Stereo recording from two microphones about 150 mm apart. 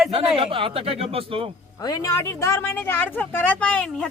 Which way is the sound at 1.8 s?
25° left (ahead or behind).